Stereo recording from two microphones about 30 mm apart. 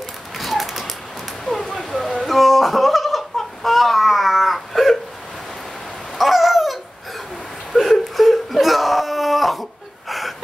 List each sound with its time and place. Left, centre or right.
0.4 s typewriter: centre
1.5 s a sound: left
1.8 s music: centre
2.2 s a sound: centre
3.3 s baby cry: centre
6.1 s rain: centre
7.7 s whimper: centre